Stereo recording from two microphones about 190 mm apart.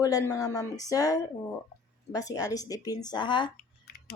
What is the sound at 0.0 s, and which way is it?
Speech, 20° left (ahead or behind).